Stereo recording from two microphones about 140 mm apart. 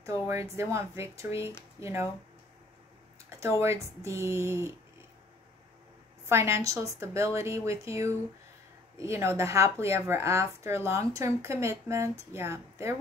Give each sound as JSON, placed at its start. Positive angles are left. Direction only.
{"t": 0.0, "sound": "speech", "side_deg": -20}
{"t": 3.3, "sound": "speech", "side_deg": -20}
{"t": 6.2, "sound": "speech", "side_deg": -20}